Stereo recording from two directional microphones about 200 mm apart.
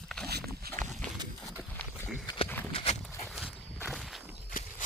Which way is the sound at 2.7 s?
30° left (ahead or behind).